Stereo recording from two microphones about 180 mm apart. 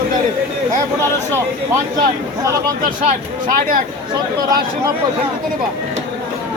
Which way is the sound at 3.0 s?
50° right (ahead or behind).